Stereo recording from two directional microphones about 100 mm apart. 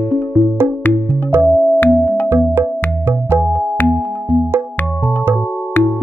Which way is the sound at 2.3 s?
25° right (ahead or behind).